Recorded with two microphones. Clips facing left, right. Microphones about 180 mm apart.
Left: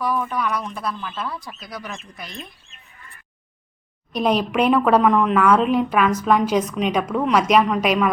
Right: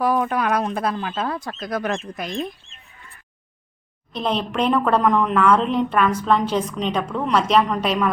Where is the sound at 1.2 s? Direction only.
50° right (ahead or behind).